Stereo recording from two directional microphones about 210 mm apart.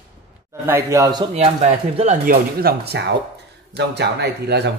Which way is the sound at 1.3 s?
30° right (ahead or behind).